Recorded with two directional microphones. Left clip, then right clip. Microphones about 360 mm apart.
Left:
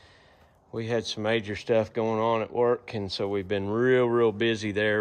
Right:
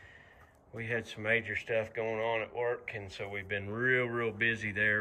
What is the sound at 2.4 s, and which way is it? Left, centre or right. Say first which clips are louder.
Speech: left 9 dB; left.